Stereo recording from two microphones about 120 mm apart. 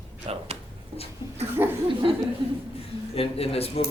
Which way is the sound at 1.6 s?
20° right (ahead or behind).